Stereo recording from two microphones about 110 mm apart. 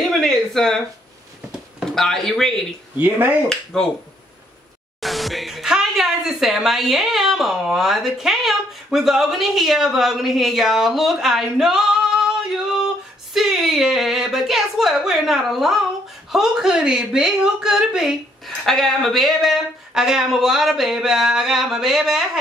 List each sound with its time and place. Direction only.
0.1 s a sound: centre (ahead or behind)
1.8 s speech: 5° left (ahead or behind)
3.0 s speech: 15° right (ahead or behind)
5.0 s a woman's voice: centre (ahead or behind)